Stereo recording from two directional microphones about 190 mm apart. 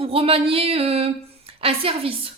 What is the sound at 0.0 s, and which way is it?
A woman's voice, 30° right (ahead or behind).